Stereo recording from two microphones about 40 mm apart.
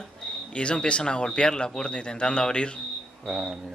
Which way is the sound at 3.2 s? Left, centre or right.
Centre.